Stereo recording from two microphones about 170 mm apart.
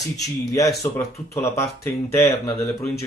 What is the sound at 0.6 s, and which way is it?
Speech, 20° left (ahead or behind).